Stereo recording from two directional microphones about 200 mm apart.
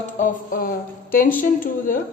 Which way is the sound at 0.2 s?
45° left (ahead or behind).